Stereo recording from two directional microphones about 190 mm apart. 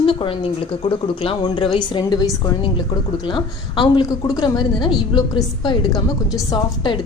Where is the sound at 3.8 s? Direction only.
20° left (ahead or behind).